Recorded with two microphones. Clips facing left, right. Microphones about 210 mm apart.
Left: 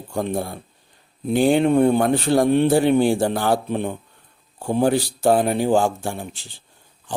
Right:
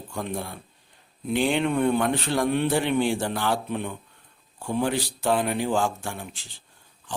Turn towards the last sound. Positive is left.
turn(degrees=30)  # may be behind; listen again after turning